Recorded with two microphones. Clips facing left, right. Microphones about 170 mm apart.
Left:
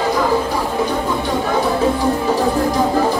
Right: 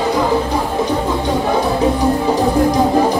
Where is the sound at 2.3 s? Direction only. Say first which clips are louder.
Right 3 dB; 15° right (ahead or behind).